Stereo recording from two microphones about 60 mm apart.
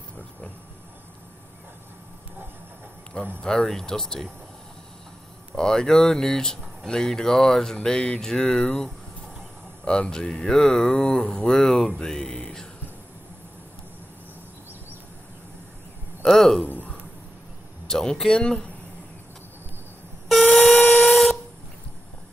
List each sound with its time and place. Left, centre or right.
3.4 s speech: centre
5.5 s speech: centre
9.8 s speech: centre
16.3 s speech: centre
16.6 s a sound: left
17.8 s speech: centre
20.2 s steam whistle: centre